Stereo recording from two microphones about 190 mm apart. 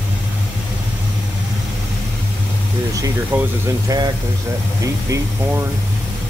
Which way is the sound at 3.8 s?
20° right (ahead or behind).